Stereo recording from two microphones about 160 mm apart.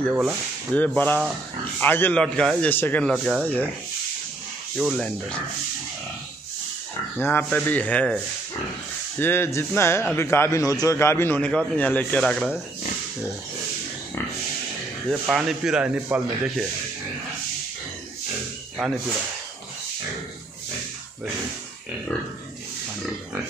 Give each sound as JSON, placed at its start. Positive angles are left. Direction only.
{"t": 0.1, "sound": "speech", "side_deg": -5}
{"t": 0.7, "sound": "a man's voice", "side_deg": 10}
{"t": 4.7, "sound": "speech", "side_deg": 0}
{"t": 7.2, "sound": "a man's voice", "side_deg": 15}
{"t": 9.2, "sound": "a man's voice", "side_deg": 15}
{"t": 15.0, "sound": "speech", "side_deg": -5}